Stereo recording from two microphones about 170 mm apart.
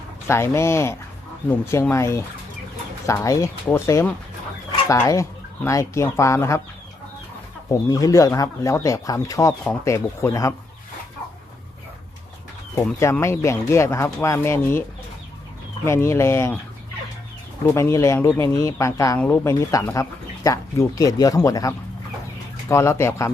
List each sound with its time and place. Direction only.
0.3 s speech: 15° left (ahead or behind)
7.7 s speech: 20° left (ahead or behind)
12.7 s speech: 15° left (ahead or behind)
17.7 s speech: 15° left (ahead or behind)